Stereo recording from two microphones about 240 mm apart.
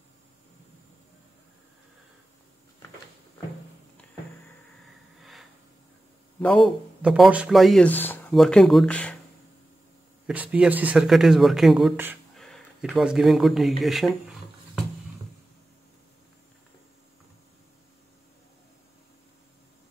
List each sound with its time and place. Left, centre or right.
6.4 s a man's voice: centre
10.2 s a man's voice: centre